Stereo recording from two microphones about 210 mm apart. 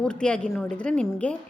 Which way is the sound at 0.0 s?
5° left (ahead or behind).